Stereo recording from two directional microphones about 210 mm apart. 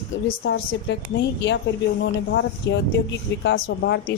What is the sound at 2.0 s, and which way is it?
A woman's voice, 55° left (ahead or behind).